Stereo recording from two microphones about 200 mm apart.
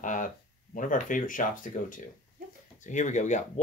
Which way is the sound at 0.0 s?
40° left (ahead or behind).